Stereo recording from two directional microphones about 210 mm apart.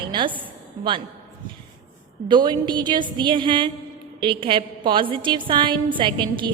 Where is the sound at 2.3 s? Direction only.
20° right (ahead or behind).